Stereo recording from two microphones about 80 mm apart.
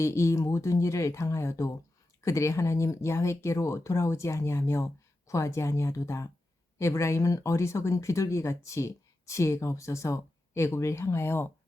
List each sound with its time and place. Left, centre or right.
0.0 s speech: left